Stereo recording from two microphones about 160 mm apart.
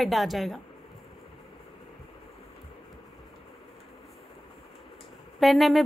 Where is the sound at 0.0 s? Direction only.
Centre (ahead or behind).